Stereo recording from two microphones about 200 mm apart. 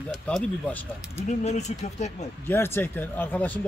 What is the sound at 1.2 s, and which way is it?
Speech, 35° left (ahead or behind).